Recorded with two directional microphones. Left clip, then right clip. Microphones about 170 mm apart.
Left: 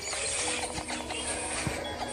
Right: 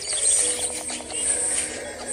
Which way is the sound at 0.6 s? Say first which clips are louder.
Right 2 dB; 40° right (ahead or behind).